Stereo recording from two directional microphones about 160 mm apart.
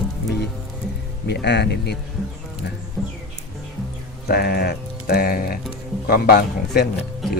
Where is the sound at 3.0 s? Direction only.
Centre (ahead or behind).